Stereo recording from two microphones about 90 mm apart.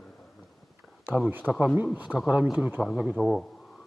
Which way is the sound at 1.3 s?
20° right (ahead or behind).